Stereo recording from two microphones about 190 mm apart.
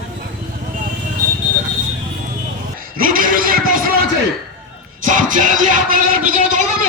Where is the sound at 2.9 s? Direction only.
45° right (ahead or behind).